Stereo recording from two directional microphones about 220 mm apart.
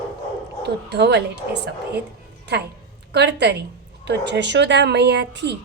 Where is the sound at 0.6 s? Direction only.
50° right (ahead or behind).